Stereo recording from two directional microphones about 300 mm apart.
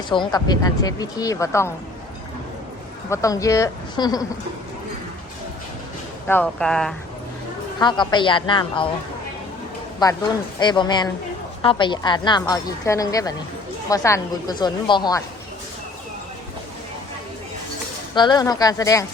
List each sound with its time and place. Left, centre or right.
0.1 s a woman's voice: centre
3.1 s a woman's voice: centre
6.2 s speech: centre
7.8 s a woman's voice: centre
10.0 s a woman's voice: centre
18.1 s a woman's voice: centre